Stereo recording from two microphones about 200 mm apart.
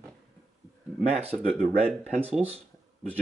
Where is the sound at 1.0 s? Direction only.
30° right (ahead or behind).